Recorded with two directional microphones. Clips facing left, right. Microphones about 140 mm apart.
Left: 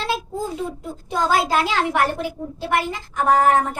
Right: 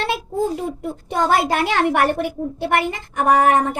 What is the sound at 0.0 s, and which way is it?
A child's voice, 60° right (ahead or behind).